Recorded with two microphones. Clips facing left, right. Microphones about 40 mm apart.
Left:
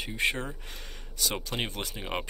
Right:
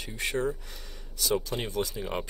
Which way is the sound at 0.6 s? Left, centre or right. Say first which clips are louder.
Left 2 dB; left.